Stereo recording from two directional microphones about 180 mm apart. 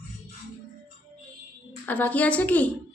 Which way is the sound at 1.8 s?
10° left (ahead or behind).